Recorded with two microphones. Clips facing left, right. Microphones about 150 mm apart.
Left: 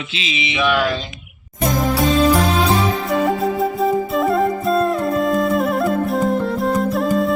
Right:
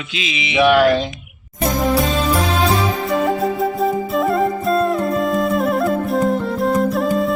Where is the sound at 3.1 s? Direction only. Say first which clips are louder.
Right 2 dB; centre (ahead or behind).